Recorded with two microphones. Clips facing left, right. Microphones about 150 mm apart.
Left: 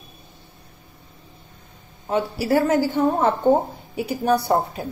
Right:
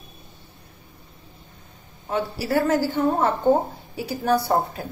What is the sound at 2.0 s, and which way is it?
A woman's voice, 15° left (ahead or behind).